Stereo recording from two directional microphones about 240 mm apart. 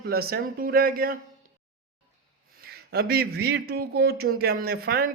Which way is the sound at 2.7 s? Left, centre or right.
Right.